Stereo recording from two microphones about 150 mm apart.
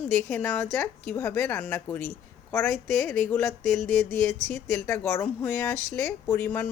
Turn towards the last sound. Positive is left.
turn(degrees=15)  # may be behind; listen again after turning